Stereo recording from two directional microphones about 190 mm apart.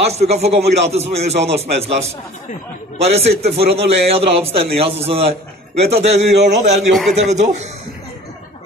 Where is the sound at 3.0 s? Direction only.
35° right (ahead or behind).